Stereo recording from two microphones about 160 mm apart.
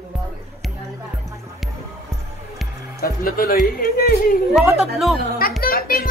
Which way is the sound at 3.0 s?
65° left (ahead or behind).